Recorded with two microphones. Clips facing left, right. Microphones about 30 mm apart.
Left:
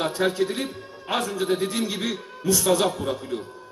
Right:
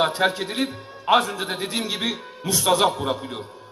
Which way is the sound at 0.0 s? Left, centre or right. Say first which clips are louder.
Right 2 dB; right.